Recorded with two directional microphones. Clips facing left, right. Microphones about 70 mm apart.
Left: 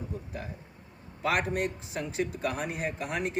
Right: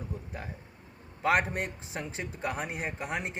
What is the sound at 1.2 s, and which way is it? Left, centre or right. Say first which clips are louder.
A man's voice: right 1 dB; right.